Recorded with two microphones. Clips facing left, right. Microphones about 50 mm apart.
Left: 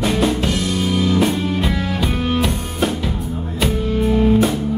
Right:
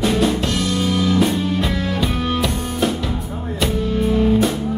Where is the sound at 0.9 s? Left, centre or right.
Centre.